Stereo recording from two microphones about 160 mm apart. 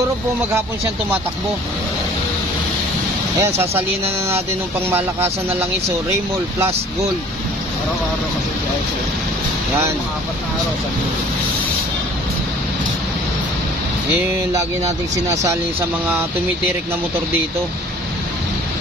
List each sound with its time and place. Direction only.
3.3 s speech: 15° right (ahead or behind)
4.8 s speech: 15° right (ahead or behind)